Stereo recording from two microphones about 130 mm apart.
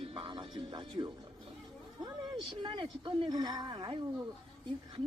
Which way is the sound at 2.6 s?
40° right (ahead or behind).